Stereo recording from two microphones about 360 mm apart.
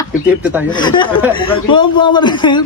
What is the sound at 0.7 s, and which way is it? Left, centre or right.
A man's voice, centre.